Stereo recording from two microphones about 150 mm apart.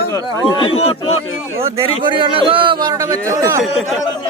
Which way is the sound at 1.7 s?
35° right (ahead or behind).